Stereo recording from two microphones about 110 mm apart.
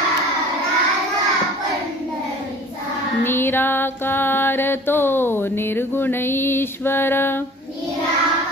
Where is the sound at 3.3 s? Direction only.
20° left (ahead or behind).